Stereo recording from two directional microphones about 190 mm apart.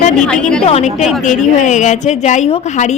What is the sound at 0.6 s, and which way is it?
A woman's voice, 30° left (ahead or behind).